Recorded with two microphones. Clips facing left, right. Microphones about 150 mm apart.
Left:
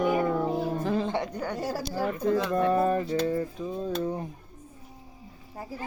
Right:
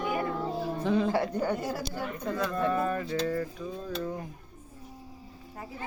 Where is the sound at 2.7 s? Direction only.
30° left (ahead or behind).